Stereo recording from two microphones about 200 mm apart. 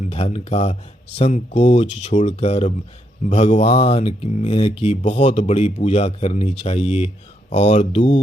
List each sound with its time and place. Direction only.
0.0 s speech: 30° left (ahead or behind)